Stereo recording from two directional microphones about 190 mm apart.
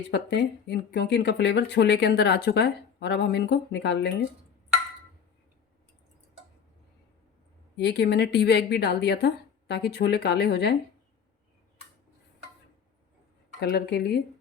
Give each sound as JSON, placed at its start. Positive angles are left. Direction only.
{"t": 0.1, "sound": "speech", "side_deg": 60}
{"t": 7.8, "sound": "speech", "side_deg": 65}
{"t": 13.6, "sound": "speech", "side_deg": 55}